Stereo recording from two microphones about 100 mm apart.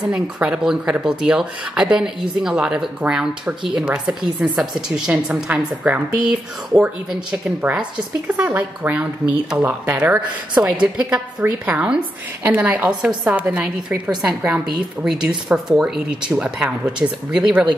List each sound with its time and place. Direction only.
0.0 s a woman's voice: 5° right (ahead or behind)